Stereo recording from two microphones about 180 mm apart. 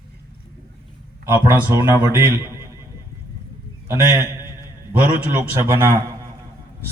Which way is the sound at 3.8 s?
15° right (ahead or behind).